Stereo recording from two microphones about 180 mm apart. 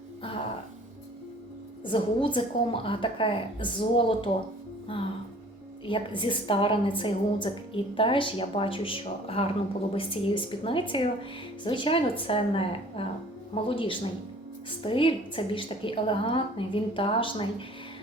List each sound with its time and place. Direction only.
1.8 s a woman's voice: 30° left (ahead or behind)